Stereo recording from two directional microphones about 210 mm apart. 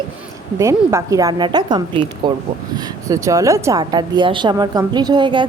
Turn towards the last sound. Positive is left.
turn(degrees=-20)  # may be behind; listen again after turning